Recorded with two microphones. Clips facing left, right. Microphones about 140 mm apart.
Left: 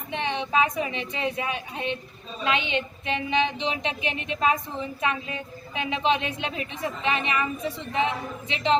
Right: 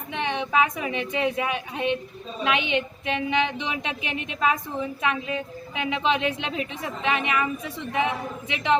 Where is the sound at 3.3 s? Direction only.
20° left (ahead or behind).